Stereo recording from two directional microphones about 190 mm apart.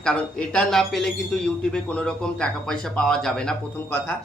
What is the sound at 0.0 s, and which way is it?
Speech, 5° left (ahead or behind).